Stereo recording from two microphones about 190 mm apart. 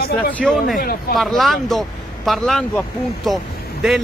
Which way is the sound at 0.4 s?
5° left (ahead or behind).